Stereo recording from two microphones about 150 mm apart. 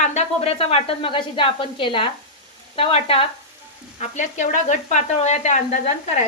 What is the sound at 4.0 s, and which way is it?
Speech, 55° left (ahead or behind).